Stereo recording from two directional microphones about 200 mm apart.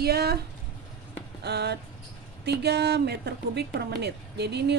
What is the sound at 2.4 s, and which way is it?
A woman's voice, 55° right (ahead or behind).